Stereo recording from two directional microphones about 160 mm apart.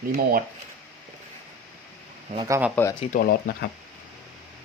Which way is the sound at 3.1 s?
70° left (ahead or behind).